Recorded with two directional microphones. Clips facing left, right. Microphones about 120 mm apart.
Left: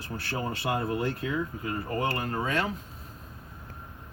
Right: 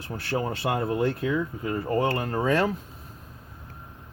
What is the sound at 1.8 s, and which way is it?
Speech, 30° right (ahead or behind).